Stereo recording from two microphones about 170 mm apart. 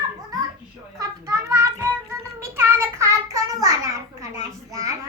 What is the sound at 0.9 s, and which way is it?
Child singing, 20° right (ahead or behind).